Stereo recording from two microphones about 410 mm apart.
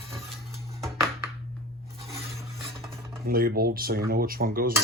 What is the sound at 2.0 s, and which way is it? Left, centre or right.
Scrape, centre.